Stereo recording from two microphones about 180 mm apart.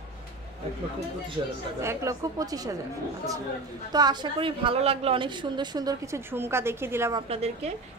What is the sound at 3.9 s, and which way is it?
A woman's voice, 25° right (ahead or behind).